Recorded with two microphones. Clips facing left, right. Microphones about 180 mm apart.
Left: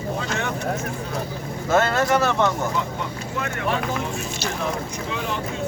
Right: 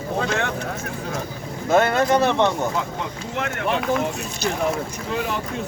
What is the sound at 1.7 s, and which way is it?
Speech, 15° right (ahead or behind).